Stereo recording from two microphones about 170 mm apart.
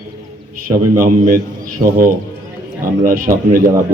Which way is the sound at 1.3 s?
55° right (ahead or behind).